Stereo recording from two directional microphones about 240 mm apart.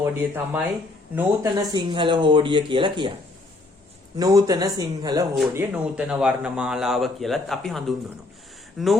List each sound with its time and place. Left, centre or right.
0.0 s speech: centre
4.2 s speech: centre